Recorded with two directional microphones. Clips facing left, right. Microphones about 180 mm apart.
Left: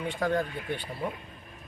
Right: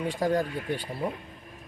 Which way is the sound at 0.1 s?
35° right (ahead or behind).